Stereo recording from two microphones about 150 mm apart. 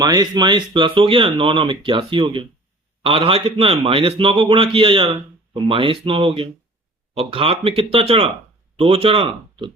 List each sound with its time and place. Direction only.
0.0 s speech: 25° right (ahead or behind)